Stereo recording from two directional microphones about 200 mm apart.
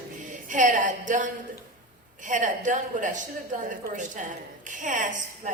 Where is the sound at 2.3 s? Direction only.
40° right (ahead or behind).